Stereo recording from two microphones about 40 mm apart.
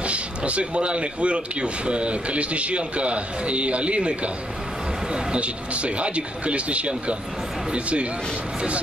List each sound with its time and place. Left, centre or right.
0.0 s speech: right